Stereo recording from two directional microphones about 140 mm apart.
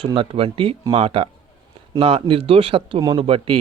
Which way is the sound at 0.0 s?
40° right (ahead or behind).